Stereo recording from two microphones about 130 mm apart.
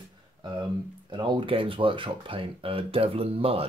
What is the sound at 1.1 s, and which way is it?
Speech, 40° right (ahead or behind).